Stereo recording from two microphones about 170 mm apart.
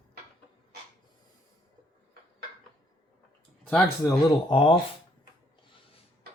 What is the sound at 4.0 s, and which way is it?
Speech, 20° left (ahead or behind).